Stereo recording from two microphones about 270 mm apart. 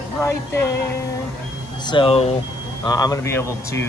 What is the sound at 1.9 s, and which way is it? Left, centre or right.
Speech, centre.